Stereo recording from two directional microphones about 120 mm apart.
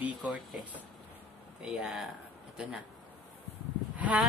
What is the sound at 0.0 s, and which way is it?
Speech, 10° right (ahead or behind).